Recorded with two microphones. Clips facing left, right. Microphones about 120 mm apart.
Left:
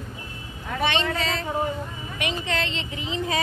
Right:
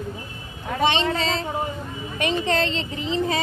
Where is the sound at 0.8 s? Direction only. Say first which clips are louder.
Right 3 dB; 25° right (ahead or behind).